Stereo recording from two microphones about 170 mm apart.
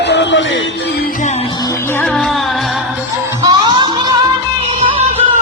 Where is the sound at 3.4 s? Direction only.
25° right (ahead or behind).